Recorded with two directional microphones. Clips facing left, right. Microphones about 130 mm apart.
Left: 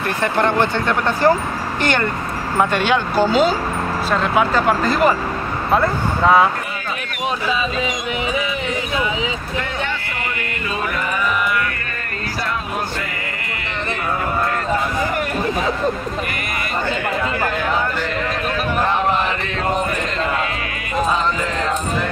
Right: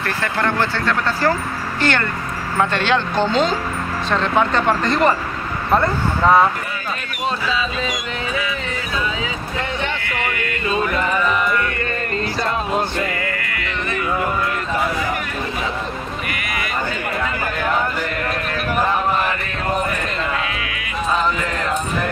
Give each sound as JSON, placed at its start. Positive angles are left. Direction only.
{"t": 0.0, "sound": "speech", "side_deg": 20}